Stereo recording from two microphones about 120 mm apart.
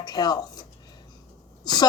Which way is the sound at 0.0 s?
35° left (ahead or behind).